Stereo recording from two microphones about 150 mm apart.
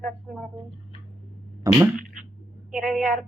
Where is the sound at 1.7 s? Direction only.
20° right (ahead or behind).